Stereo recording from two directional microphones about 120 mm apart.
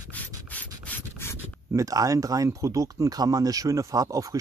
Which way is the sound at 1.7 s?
30° right (ahead or behind).